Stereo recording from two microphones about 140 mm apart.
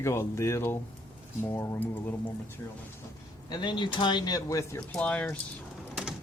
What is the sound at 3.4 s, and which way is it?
Speech, 30° left (ahead or behind).